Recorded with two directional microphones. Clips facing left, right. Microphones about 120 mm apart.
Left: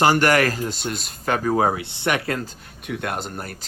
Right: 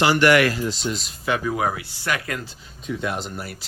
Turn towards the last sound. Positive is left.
turn(degrees=50)  # may be behind; listen again after turning